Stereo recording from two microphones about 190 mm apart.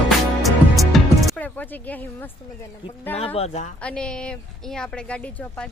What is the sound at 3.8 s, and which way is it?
A woman's voice, 5° left (ahead or behind).